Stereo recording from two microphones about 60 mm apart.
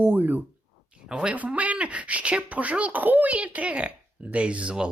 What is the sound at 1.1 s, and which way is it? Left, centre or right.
Speech, centre.